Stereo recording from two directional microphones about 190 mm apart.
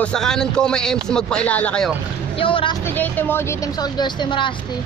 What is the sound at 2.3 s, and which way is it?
Speech, 30° left (ahead or behind).